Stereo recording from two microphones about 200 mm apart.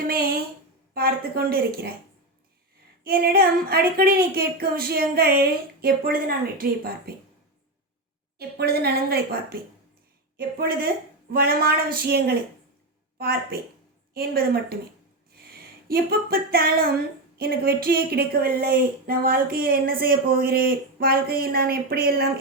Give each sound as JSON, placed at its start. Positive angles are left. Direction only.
{"t": 0.9, "sound": "speech", "side_deg": -50}
{"t": 3.0, "sound": "speech", "side_deg": -50}
{"t": 8.4, "sound": "a woman's voice", "side_deg": -50}
{"t": 15.9, "sound": "speech", "side_deg": -50}